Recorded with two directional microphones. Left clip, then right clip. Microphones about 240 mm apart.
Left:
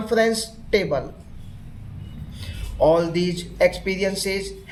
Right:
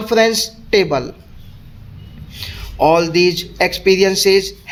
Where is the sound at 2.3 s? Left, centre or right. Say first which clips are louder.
Right 8 dB; right.